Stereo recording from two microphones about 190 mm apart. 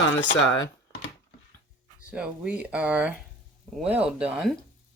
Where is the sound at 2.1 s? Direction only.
5° right (ahead or behind).